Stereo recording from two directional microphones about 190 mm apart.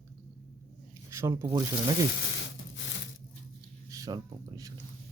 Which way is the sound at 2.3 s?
75° left (ahead or behind).